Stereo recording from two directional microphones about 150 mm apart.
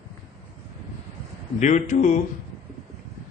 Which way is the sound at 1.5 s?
55° left (ahead or behind).